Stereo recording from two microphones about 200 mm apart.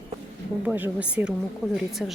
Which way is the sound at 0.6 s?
10° right (ahead or behind).